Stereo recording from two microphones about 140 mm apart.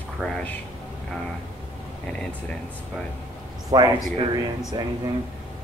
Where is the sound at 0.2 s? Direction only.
10° left (ahead or behind).